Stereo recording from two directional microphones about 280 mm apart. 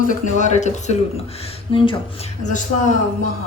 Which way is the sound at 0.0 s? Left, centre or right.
Left.